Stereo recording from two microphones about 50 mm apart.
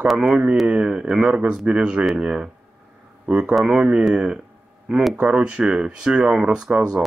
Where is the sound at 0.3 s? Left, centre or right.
Centre.